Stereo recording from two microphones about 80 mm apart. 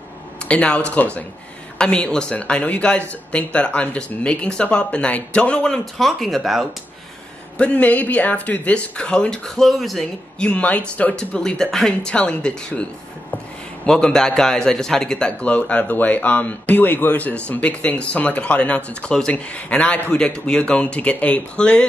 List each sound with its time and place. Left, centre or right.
0.5 s speech: centre
7.5 s speech: centre
10.4 s speech: centre
13.8 s speech: centre